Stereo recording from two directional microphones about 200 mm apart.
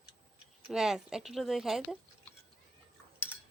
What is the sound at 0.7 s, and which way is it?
Speech, centre (ahead or behind).